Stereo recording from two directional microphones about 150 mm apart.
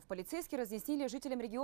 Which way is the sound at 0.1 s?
30° left (ahead or behind).